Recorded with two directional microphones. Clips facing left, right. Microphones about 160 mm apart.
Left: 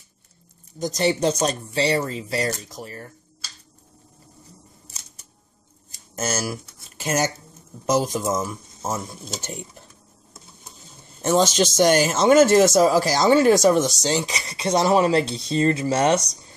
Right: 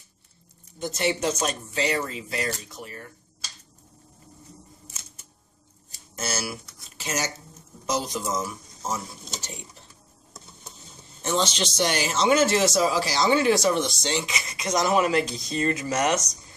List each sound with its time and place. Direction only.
0.7 s speech: 40° left (ahead or behind)
4.9 s a sound: 35° left (ahead or behind)
6.1 s speech: 45° left (ahead or behind)
11.2 s speech: 45° left (ahead or behind)